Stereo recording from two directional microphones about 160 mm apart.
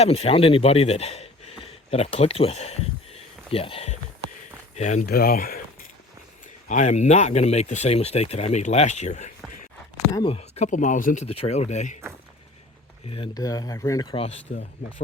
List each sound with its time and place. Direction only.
0.0 s a man's voice: 40° left (ahead or behind)
5.0 s speech: 70° left (ahead or behind)
6.7 s speech: 50° left (ahead or behind)
11.3 s speech: 40° left (ahead or behind)
13.1 s speech: 30° left (ahead or behind)
14.1 s speech: 35° left (ahead or behind)